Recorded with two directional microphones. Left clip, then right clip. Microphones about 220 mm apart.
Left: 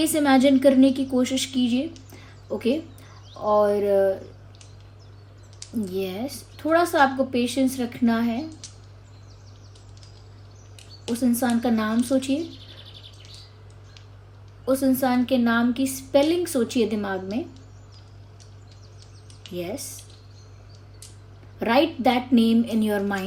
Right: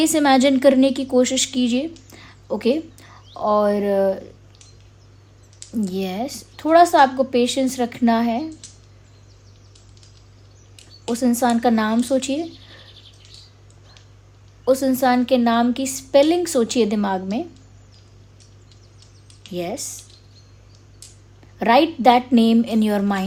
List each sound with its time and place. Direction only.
0.0 s a woman's voice: 40° right (ahead or behind)
2.0 s a sound: 40° right (ahead or behind)
3.4 s a woman's voice: 40° right (ahead or behind)
5.8 s a woman's voice: 40° right (ahead or behind)
11.1 s a woman's voice: 35° right (ahead or behind)
14.6 s a woman's voice: 40° right (ahead or behind)
19.5 s a woman's voice: 35° right (ahead or behind)
21.6 s a woman's voice: 40° right (ahead or behind)